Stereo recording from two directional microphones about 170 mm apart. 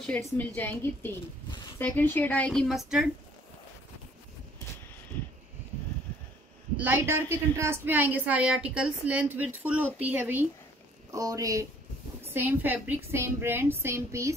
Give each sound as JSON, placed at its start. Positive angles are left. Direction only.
{"t": 0.0, "sound": "a woman's voice", "side_deg": 5}
{"t": 5.1, "sound": "a sound", "side_deg": 10}
{"t": 6.8, "sound": "a woman's voice", "side_deg": -10}